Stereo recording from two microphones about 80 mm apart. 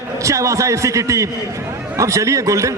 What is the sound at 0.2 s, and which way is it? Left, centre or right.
A man's voice, right.